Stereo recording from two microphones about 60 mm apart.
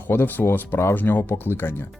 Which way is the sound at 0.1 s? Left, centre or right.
Left.